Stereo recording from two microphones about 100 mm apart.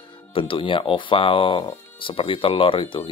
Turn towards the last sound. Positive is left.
turn(degrees=60)  # may be behind; listen again after turning